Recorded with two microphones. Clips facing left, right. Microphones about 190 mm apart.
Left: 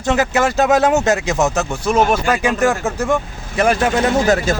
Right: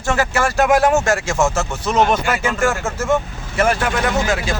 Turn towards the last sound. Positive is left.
turn(degrees=40)  # may be behind; listen again after turning